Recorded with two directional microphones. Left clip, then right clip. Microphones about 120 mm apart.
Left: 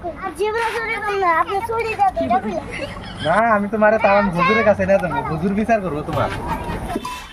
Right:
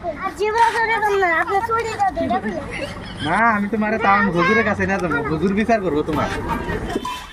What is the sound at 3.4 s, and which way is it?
Speech, 50° left (ahead or behind).